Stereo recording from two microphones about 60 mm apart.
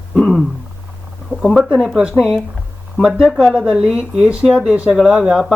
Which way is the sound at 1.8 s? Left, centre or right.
Centre.